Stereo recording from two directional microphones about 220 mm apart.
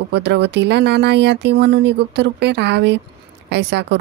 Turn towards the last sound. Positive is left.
turn(degrees=-50)  # may be behind; listen again after turning